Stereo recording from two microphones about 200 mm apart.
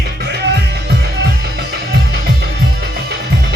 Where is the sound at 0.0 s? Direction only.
55° right (ahead or behind).